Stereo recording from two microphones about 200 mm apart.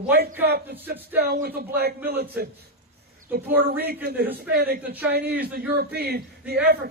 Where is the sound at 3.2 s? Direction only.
45° right (ahead or behind).